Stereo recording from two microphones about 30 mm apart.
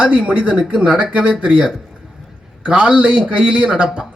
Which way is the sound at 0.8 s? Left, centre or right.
Right.